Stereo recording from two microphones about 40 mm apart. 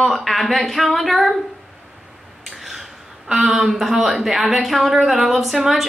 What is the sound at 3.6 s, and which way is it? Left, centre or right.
A woman's voice, centre.